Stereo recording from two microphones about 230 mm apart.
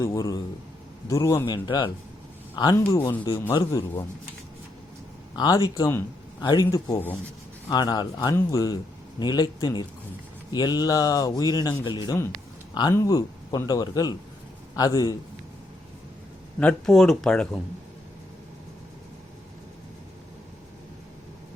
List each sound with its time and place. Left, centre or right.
0.0 s a man's voice: centre
5.4 s a man's voice: centre
16.6 s speech: centre